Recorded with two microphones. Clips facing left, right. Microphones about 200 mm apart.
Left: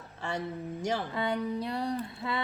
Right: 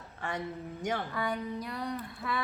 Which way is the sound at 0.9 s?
25° left (ahead or behind).